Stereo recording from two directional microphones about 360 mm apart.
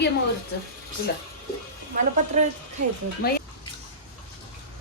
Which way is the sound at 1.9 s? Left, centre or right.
Right.